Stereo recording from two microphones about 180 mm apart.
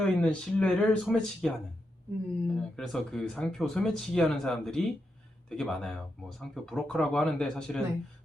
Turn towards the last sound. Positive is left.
turn(degrees=5)  # may be behind; listen again after turning